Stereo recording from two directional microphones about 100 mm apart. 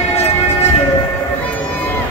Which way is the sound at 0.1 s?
90° left.